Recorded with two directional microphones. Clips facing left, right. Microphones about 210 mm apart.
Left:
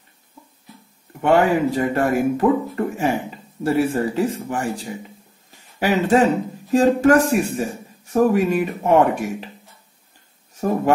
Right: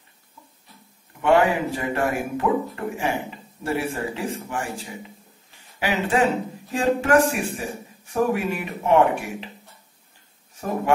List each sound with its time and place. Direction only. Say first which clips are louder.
1.2 s speech: left 3 dB; 40° left (ahead or behind)
5.8 s speech: left 5 dB; 40° left (ahead or behind)